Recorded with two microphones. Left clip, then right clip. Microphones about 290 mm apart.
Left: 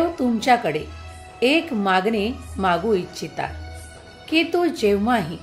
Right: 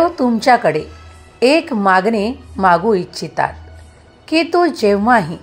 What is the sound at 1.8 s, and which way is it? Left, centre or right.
Speech, centre.